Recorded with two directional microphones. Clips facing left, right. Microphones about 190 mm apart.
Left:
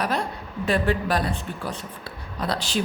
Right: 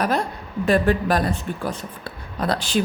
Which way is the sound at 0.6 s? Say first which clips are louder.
Right 4 dB; 50° right (ahead or behind).